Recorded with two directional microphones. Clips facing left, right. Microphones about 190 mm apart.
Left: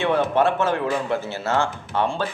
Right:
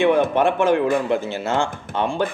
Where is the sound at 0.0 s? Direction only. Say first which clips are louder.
Right 3 dB; 15° right (ahead or behind).